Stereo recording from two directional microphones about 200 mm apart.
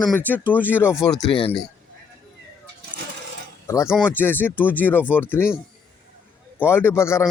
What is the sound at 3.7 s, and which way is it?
Speech, 15° left (ahead or behind).